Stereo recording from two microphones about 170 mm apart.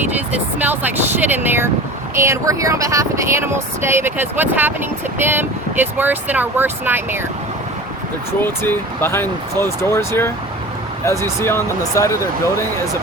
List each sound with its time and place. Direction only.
0.6 s speech: 10° right (ahead or behind)
8.4 s speech: 10° left (ahead or behind)